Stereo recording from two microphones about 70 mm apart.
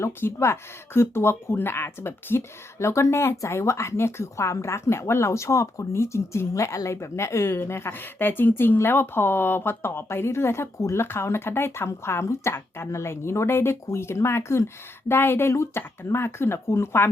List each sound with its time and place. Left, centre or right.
0.0 s speech: left